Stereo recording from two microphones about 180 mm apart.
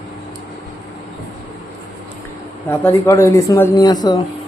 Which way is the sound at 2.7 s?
15° left (ahead or behind).